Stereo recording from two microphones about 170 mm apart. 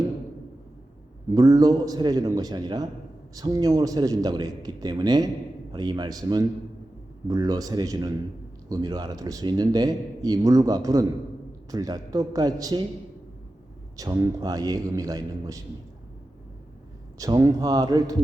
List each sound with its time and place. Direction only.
1.3 s speech: 20° right (ahead or behind)
13.9 s speech: 20° right (ahead or behind)
17.2 s speech: 20° right (ahead or behind)